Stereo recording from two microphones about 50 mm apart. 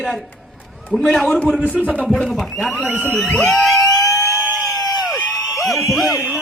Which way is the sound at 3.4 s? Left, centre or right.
Centre.